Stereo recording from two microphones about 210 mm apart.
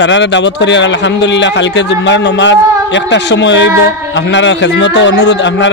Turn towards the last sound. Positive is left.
turn(degrees=55)  # may be behind; listen again after turning